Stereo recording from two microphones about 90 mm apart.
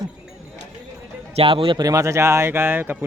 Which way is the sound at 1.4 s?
85° right.